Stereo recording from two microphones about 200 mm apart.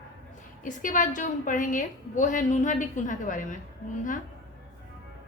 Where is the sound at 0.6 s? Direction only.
40° left (ahead or behind).